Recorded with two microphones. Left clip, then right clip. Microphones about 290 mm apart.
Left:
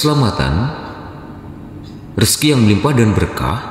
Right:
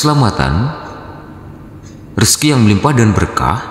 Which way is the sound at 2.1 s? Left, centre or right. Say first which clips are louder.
Right 2 dB; centre.